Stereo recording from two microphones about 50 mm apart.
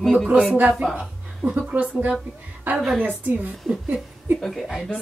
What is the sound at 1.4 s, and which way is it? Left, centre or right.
A woman's voice, right.